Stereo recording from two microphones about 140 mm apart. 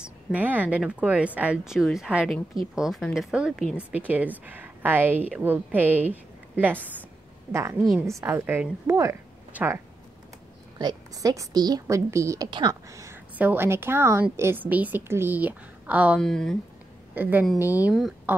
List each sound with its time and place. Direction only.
0.0 s a woman's voice: 10° right (ahead or behind)
8.1 s a woman's voice: 20° right (ahead or behind)
10.8 s a woman's voice: 30° right (ahead or behind)
12.4 s speech: 35° right (ahead or behind)
12.9 s a sound: 20° right (ahead or behind)
13.4 s speech: 15° right (ahead or behind)
16.2 s a woman's voice: 5° left (ahead or behind)
17.1 s speech: 15° right (ahead or behind)